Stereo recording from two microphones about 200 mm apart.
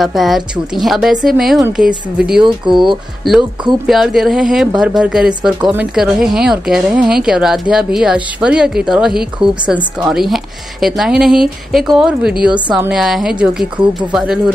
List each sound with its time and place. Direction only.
0.0 s a woman's voice: centre (ahead or behind)
2.4 s speech: 25° right (ahead or behind)
3.8 s a woman's voice: centre (ahead or behind)